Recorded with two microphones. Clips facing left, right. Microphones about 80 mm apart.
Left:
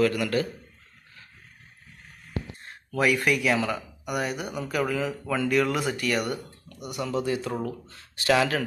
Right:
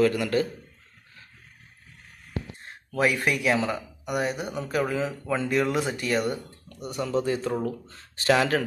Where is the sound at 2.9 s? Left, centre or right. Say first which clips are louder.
Left 1 dB; right.